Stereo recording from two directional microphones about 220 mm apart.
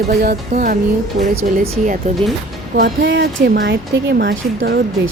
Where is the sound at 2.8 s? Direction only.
40° right (ahead or behind).